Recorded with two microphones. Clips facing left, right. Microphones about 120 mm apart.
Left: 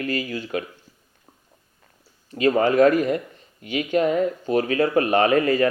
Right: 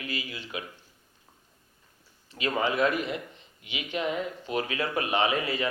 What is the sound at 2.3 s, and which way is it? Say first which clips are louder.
Speech: left 10 dB; 45° left (ahead or behind).